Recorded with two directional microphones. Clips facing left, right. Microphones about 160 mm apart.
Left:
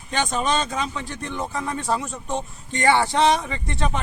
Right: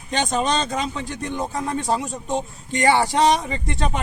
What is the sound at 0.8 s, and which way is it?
Speech, 15° right (ahead or behind).